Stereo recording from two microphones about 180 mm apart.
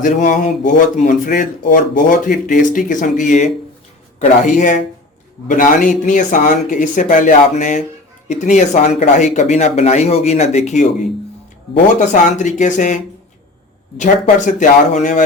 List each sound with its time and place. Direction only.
0.0 s speech: 45° left (ahead or behind)
11.9 s speech: 40° left (ahead or behind)
14.0 s speech: 45° left (ahead or behind)